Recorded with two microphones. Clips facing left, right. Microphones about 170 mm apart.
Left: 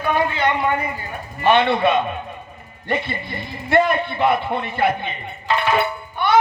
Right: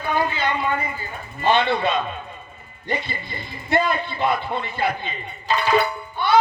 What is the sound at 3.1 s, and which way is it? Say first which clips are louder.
Speech: left 4 dB; 60° left (ahead or behind).